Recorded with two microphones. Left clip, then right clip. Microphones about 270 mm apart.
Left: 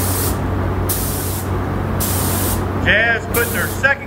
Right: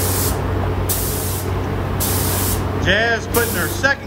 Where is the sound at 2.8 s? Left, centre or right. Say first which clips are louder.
Left 2 dB; centre.